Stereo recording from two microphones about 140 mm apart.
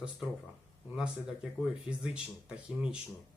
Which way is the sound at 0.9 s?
5° right (ahead or behind).